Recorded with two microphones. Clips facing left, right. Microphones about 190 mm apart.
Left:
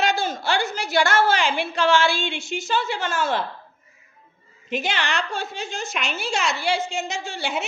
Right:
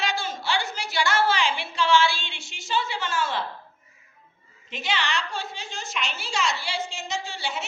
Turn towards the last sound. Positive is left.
turn(degrees=50)  # may be behind; listen again after turning